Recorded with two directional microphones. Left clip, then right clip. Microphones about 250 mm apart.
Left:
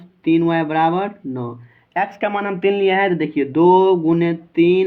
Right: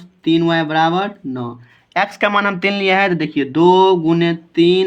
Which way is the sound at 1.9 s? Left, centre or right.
Right.